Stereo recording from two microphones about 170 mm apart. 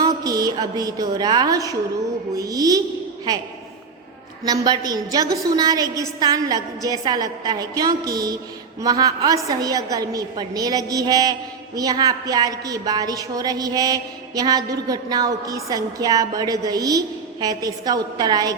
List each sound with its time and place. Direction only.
0.0 s a woman's voice: 20° right (ahead or behind)
4.4 s a woman's voice: 25° right (ahead or behind)